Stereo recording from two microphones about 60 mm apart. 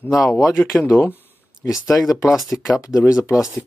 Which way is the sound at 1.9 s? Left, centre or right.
Left.